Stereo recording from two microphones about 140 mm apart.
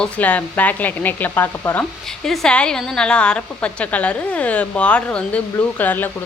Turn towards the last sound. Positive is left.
turn(degrees=15)  # may be behind; listen again after turning